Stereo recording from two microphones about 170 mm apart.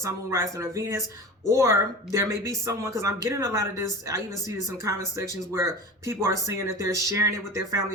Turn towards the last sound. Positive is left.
turn(degrees=-20)  # may be behind; listen again after turning